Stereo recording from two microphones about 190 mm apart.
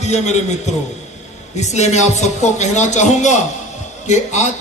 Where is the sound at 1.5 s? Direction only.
35° left (ahead or behind).